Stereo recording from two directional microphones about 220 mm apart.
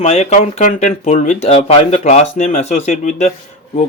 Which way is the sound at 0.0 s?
30° left (ahead or behind).